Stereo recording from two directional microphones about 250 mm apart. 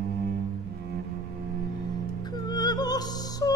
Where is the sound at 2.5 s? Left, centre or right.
Centre.